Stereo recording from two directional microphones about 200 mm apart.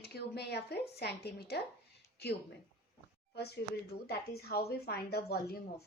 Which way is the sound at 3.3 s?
55° left (ahead or behind).